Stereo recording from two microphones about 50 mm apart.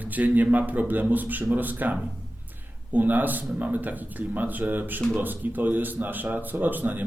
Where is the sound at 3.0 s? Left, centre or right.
Right.